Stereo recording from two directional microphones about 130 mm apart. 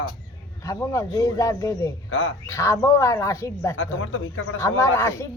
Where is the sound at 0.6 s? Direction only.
25° left (ahead or behind).